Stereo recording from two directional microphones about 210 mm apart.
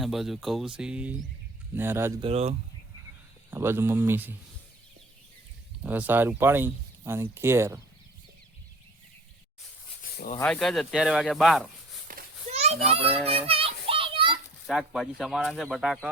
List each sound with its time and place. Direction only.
0.0 s speech: centre (ahead or behind)
2.2 s speech: 30° right (ahead or behind)
3.5 s speech: 10° right (ahead or behind)
5.8 s speech: 10° right (ahead or behind)
10.0 s a sound: 40° left (ahead or behind)
10.4 s speech: 5° left (ahead or behind)
12.0 s a sound: 35° right (ahead or behind)
13.5 s children playing: 25° right (ahead or behind)
14.7 s speech: centre (ahead or behind)